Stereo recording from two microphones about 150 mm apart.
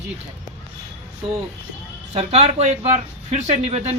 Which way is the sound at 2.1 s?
40° right (ahead or behind).